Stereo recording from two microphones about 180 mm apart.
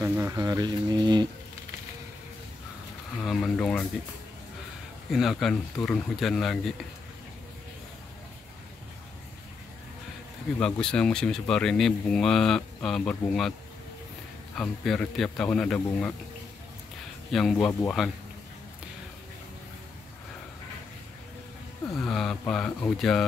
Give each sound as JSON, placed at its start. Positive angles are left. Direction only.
{"t": 0.0, "sound": "speech", "side_deg": -15}
{"t": 3.2, "sound": "speech", "side_deg": 5}
{"t": 5.1, "sound": "speech", "side_deg": 0}
{"t": 10.6, "sound": "speech", "side_deg": 5}
{"t": 14.5, "sound": "speech", "side_deg": 5}
{"t": 17.3, "sound": "speech", "side_deg": 0}
{"t": 22.0, "sound": "a sound", "side_deg": 5}
{"t": 22.5, "sound": "speech", "side_deg": 5}